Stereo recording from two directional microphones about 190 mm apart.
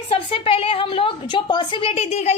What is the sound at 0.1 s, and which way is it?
A woman's voice, 30° left (ahead or behind).